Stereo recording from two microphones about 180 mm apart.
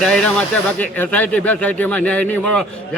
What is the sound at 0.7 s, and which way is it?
Speech, 10° left (ahead or behind).